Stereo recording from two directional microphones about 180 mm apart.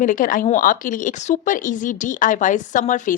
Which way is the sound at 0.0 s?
45° left (ahead or behind).